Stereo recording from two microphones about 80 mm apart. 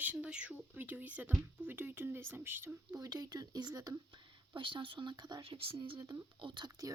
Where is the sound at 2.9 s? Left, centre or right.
Right.